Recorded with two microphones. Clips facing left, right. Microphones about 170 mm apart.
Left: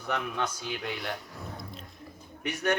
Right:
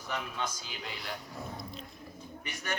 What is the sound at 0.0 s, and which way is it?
Speech, 65° left (ahead or behind).